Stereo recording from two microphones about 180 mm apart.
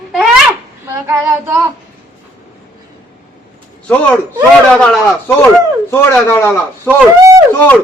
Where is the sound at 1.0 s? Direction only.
15° right (ahead or behind).